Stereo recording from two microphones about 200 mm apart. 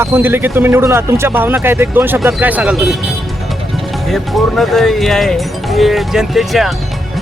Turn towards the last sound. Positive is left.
turn(degrees=0)  # may be behind; listen again after turning